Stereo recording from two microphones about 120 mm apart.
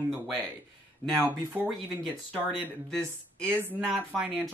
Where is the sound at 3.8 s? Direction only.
5° right (ahead or behind).